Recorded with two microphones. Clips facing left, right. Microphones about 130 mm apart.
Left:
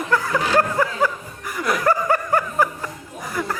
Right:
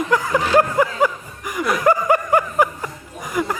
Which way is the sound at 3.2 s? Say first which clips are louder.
Right 4 dB; 15° right (ahead or behind).